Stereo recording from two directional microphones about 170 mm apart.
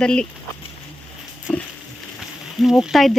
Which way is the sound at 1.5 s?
5° left (ahead or behind).